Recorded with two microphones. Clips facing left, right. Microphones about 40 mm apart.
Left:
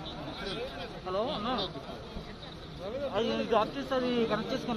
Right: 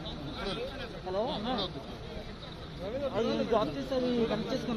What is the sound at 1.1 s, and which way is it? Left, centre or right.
Speech, left.